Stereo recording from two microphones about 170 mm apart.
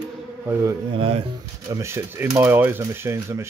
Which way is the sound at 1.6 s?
15° right (ahead or behind).